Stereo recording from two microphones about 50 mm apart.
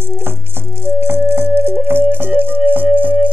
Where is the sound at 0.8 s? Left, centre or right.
Right.